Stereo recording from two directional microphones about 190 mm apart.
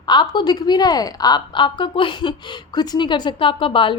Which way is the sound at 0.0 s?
25° left (ahead or behind).